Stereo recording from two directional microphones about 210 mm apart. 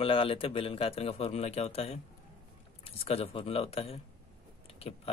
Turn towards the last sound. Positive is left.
turn(degrees=25)  # may be behind; listen again after turning